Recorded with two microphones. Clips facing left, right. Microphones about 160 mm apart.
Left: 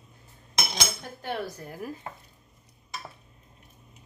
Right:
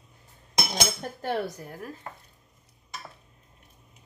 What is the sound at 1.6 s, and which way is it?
Speech, 5° left (ahead or behind).